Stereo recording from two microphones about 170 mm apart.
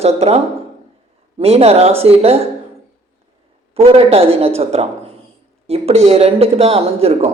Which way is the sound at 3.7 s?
35° right (ahead or behind).